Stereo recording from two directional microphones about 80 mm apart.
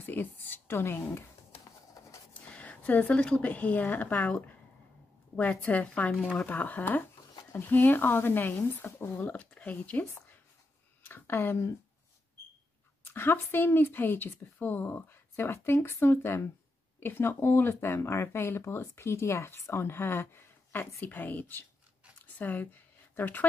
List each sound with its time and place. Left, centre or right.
0.0 s speech: left
2.5 s a woman's voice: centre
11.1 s speech: left
13.0 s a woman's voice: left
22.2 s a sound: left